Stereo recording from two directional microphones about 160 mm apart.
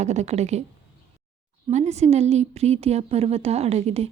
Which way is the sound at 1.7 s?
45° right (ahead or behind).